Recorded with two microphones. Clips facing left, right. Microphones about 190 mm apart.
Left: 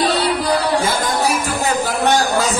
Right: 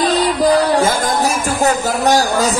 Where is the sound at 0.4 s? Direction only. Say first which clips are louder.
Right 5 dB; 45° right (ahead or behind).